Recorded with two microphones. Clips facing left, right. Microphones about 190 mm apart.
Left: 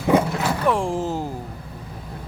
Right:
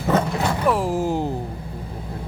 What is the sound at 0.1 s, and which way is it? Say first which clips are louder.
Music: left 3 dB; 10° left (ahead or behind).